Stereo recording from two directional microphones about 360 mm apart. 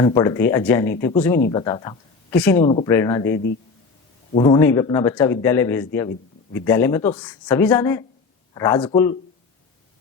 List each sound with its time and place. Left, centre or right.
0.0 s a man's voice: centre